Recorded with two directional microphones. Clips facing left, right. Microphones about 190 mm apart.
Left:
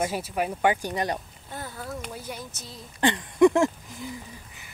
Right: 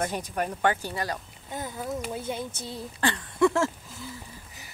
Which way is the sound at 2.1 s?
25° right (ahead or behind).